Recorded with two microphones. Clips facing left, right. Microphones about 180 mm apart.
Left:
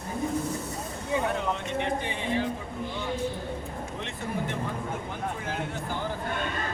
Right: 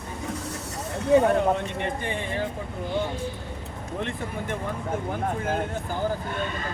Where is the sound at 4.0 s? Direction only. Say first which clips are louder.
Right 2 dB; 50° right (ahead or behind).